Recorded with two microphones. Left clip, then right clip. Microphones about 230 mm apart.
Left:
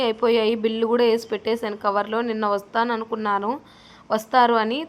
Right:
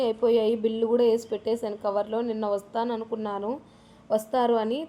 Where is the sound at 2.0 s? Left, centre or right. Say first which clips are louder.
Left 5 dB; centre.